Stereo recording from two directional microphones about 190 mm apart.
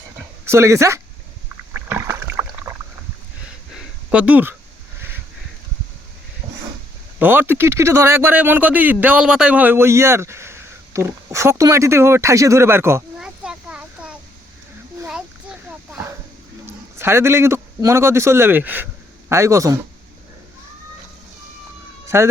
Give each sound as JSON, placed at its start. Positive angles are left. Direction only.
{"t": 0.4, "sound": "a man's voice", "side_deg": -15}
{"t": 1.7, "sound": "rowboat", "side_deg": -10}
{"t": 4.1, "sound": "a man's voice", "side_deg": -5}
{"t": 7.2, "sound": "speech", "side_deg": -10}
{"t": 15.0, "sound": "a sound", "side_deg": -5}
{"t": 17.0, "sound": "a man's voice", "side_deg": -15}
{"t": 22.0, "sound": "a sound", "side_deg": -15}